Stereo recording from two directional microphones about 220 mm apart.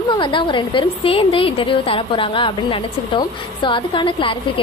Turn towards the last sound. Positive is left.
turn(degrees=25)  # may be behind; listen again after turning